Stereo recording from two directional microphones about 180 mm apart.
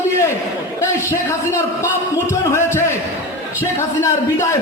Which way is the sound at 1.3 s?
15° left (ahead or behind).